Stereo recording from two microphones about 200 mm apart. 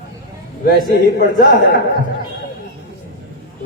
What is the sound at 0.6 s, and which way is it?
A man's voice, 50° left (ahead or behind).